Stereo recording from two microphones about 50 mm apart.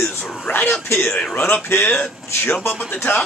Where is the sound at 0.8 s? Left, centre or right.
Left.